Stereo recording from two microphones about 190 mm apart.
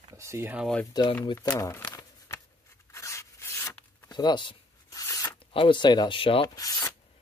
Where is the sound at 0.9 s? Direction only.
20° left (ahead or behind).